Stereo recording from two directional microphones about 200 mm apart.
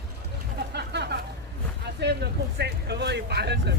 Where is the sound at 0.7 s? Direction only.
55° right (ahead or behind).